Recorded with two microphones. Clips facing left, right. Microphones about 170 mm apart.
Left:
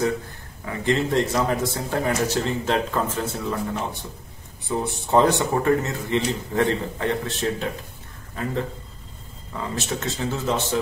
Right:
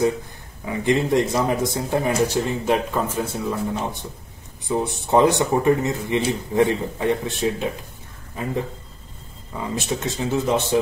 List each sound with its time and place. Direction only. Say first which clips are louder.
0.7 s a man's voice: right 3 dB; 15° right (ahead or behind)
4.6 s a man's voice: right 3 dB; 15° right (ahead or behind)
9.5 s a man's voice: right 2 dB; 15° right (ahead or behind)